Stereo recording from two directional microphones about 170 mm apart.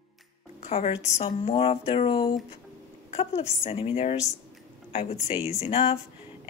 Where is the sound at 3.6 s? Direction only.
35° left (ahead or behind).